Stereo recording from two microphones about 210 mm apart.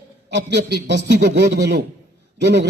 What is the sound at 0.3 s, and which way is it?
A man's voice, 55° right (ahead or behind).